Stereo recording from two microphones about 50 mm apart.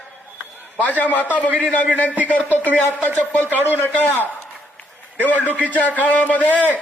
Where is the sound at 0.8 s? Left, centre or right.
Left.